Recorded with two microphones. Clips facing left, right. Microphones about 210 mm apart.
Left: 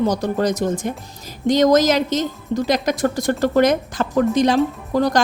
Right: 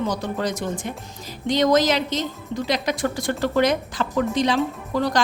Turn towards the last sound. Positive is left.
turn(degrees=45)  # may be behind; listen again after turning